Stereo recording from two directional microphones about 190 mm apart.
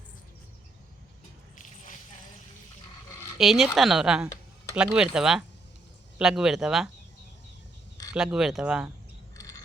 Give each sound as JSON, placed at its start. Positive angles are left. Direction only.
{"t": 3.3, "sound": "speech", "side_deg": 0}
{"t": 8.1, "sound": "speech", "side_deg": -5}
{"t": 9.3, "sound": "a sound", "side_deg": 15}